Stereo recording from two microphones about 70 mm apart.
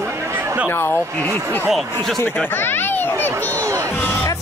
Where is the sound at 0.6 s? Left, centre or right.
Left.